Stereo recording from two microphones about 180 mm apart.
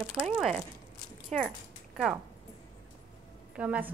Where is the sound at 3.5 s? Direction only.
5° right (ahead or behind).